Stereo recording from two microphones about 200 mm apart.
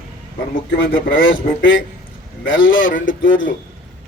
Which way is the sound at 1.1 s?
75° left (ahead or behind).